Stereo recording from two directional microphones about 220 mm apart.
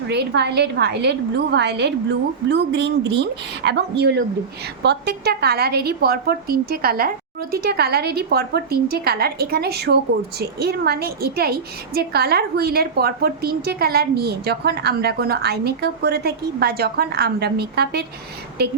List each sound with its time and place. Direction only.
0.1 s a woman's voice: 50° right (ahead or behind)